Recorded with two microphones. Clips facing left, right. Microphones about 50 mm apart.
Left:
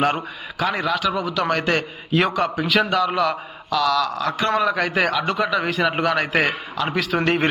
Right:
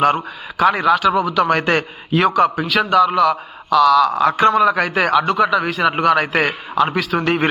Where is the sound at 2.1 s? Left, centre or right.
Centre.